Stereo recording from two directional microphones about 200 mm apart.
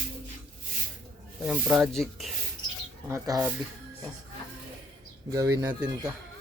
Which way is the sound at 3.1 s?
15° right (ahead or behind).